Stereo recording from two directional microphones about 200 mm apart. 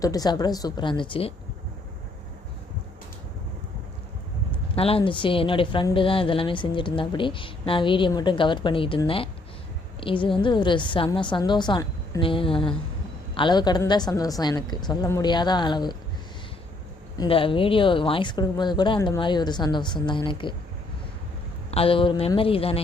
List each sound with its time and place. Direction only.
0.0 s a woman's voice: 20° left (ahead or behind)
4.7 s a woman's voice: 30° left (ahead or behind)
17.2 s a woman's voice: 25° left (ahead or behind)
21.7 s a woman's voice: 30° left (ahead or behind)